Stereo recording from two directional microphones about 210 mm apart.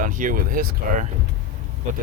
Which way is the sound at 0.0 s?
40° right (ahead or behind).